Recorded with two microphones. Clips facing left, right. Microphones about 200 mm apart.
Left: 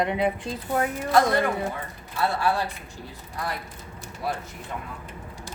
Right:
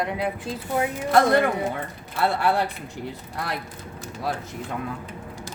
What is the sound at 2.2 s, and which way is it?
Speech, 60° right (ahead or behind).